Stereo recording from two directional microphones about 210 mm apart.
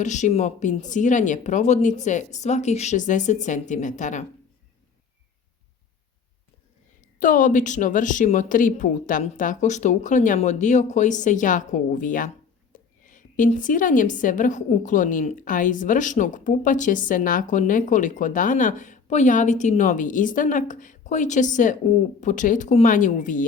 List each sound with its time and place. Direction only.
0.0 s a woman's voice: 35° left (ahead or behind)
7.2 s a woman's voice: 40° left (ahead or behind)
12.7 s whispering: 40° left (ahead or behind)
13.1 s a woman's voice: 40° left (ahead or behind)